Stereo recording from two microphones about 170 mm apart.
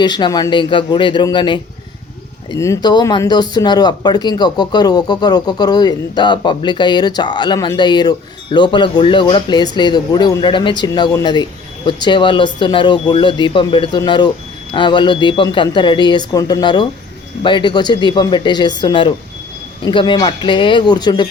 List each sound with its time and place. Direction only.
0.0 s speech: 25° left (ahead or behind)